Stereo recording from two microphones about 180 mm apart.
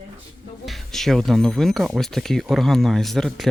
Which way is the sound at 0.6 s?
Centre (ahead or behind).